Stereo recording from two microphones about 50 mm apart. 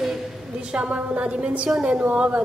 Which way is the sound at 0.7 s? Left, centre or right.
Right.